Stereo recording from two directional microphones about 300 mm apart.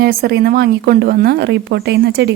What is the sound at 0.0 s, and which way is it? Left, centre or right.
Speech, right.